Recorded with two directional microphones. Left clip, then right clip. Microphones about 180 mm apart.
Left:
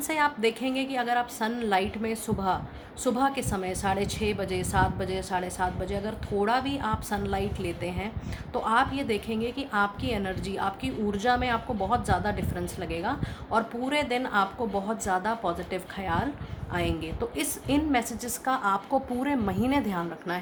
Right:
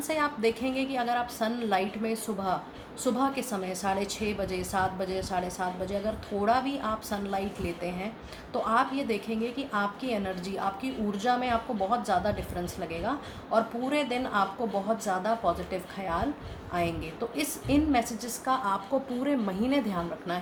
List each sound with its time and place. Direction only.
0.1 s a woman's voice: 35° left (ahead or behind)
17.3 s a woman's voice: 40° left (ahead or behind)